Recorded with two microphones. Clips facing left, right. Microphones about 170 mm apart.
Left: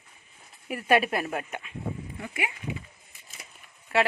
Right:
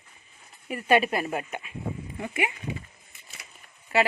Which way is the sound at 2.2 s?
25° right (ahead or behind).